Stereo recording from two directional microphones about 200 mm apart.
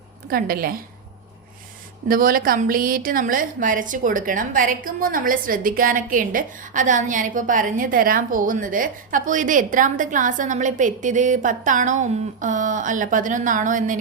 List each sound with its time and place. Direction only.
0.3 s a woman's voice: 45° right (ahead or behind)
2.0 s a woman's voice: 45° right (ahead or behind)